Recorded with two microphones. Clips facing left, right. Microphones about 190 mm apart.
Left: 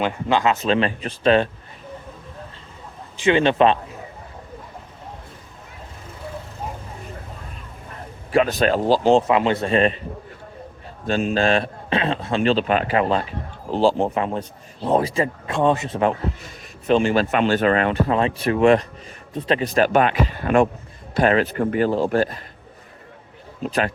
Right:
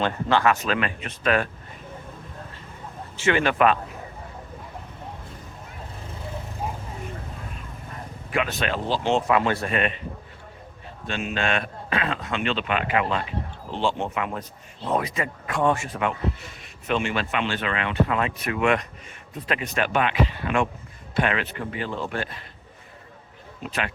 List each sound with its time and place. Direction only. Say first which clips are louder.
0.0 s speech: left 2 dB; 15° left (ahead or behind)
0.6 s a man's voice: left 6 dB; 30° left (ahead or behind)
3.2 s speech: left 5 dB; 20° left (ahead or behind)
8.3 s a man's voice: left 8 dB; 35° left (ahead or behind)
9.2 s speech: left 3 dB; 20° left (ahead or behind)
11.0 s a man's voice: left 8 dB; 35° left (ahead or behind); by 16.0 s 20° left (ahead or behind)
16.8 s a man's voice: left 8 dB; 35° left (ahead or behind)
23.6 s a man's voice: left 7 dB; 40° left (ahead or behind)